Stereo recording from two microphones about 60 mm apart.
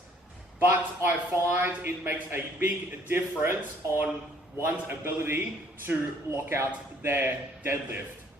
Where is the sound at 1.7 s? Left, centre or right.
Right.